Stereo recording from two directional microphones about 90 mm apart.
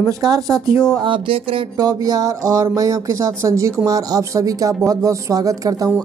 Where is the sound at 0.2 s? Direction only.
50° right (ahead or behind).